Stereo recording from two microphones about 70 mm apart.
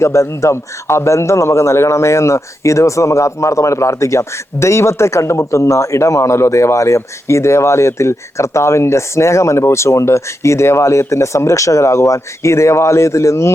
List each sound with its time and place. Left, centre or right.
0.0 s a man's voice: left